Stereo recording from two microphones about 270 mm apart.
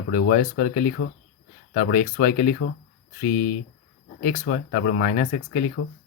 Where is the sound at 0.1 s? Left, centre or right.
Left.